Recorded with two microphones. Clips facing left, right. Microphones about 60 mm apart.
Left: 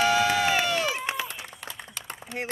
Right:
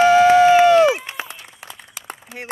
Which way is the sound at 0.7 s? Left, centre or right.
Right.